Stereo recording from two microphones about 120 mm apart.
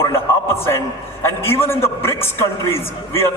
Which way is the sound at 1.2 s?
20° left (ahead or behind).